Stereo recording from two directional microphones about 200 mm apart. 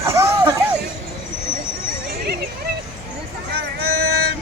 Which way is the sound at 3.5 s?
55° right (ahead or behind).